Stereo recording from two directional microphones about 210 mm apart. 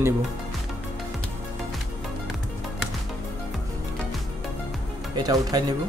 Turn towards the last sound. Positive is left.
turn(degrees=-20)  # may be behind; listen again after turning